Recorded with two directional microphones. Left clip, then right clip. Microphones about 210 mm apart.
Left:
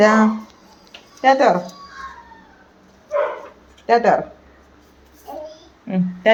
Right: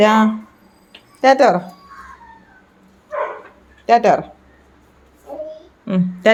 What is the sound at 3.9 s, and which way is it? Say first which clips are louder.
Speech: right 2 dB; 35° right (ahead or behind).